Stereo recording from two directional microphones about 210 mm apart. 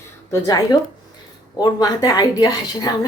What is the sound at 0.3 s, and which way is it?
Speech, 20° left (ahead or behind).